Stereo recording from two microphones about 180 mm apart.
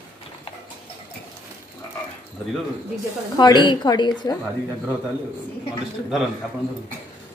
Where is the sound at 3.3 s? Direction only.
25° left (ahead or behind).